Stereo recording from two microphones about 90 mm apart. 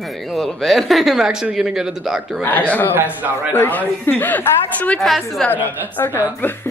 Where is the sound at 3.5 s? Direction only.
20° left (ahead or behind).